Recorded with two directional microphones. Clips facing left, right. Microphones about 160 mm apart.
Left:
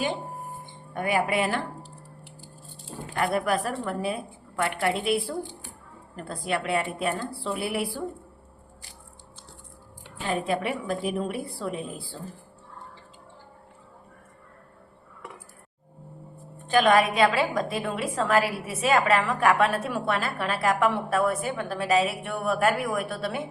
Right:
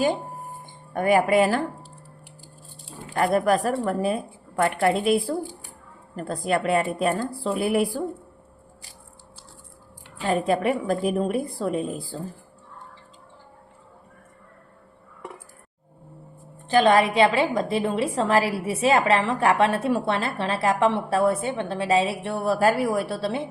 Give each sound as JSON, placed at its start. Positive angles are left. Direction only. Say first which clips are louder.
{"t": 0.9, "sound": "a woman's voice", "louder": "right 7 dB", "side_deg": -45}
{"t": 3.2, "sound": "a woman's voice", "louder": "right 5 dB", "side_deg": -40}
{"t": 10.2, "sound": "a woman's voice", "louder": "right 5 dB", "side_deg": -45}
{"t": 16.6, "sound": "a woman's voice", "louder": "right 2 dB", "side_deg": -30}